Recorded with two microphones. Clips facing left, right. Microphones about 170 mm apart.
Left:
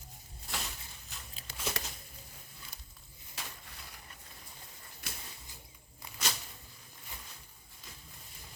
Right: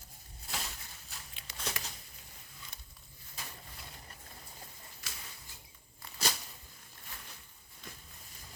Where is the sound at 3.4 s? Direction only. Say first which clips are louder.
Left 2 dB; 85° left.